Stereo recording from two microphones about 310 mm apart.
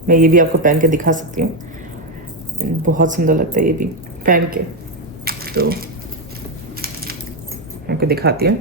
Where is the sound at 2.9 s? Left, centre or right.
Right.